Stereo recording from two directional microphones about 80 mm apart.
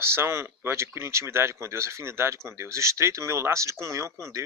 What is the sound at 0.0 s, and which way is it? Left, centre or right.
Speech, right.